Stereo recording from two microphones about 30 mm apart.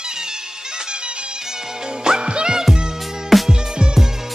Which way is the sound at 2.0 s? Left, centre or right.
Right.